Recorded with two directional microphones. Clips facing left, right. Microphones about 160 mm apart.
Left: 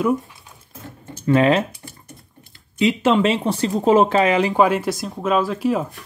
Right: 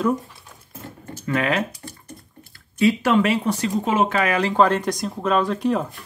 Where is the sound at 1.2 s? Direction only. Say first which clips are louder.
Left 6 dB; 30° left (ahead or behind).